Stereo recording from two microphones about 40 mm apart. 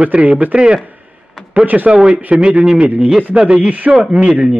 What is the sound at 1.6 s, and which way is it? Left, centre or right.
Speech, right.